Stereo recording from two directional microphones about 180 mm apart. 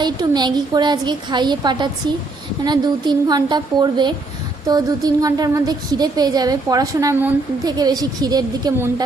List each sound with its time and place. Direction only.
0.0 s a woman's voice: 25° right (ahead or behind)